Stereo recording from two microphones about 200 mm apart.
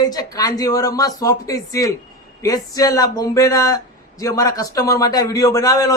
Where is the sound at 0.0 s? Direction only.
20° left (ahead or behind).